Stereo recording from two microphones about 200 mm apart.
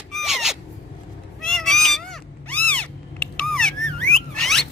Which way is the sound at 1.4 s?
5° left (ahead or behind).